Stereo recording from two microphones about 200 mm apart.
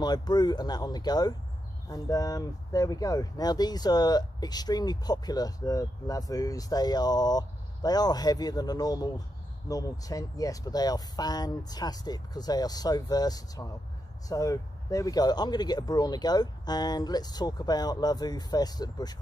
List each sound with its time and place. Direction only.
0.0 s speech: 20° left (ahead or behind)